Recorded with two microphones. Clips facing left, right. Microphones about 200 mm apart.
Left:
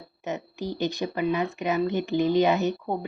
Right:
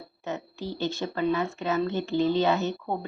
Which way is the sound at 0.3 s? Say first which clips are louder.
Left 2 dB; 15° left (ahead or behind).